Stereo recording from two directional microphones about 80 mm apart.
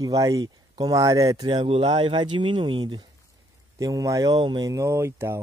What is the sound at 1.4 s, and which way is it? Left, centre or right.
Speech, right.